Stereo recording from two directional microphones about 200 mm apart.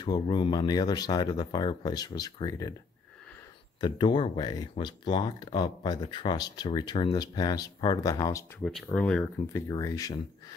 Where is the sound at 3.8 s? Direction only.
25° left (ahead or behind).